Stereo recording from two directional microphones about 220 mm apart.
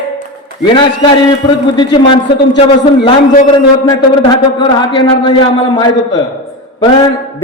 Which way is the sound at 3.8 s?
20° left (ahead or behind).